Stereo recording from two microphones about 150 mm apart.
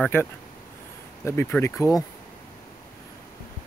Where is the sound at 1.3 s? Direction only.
15° left (ahead or behind).